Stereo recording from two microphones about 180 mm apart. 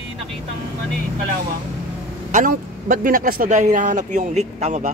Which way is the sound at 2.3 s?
45° right (ahead or behind).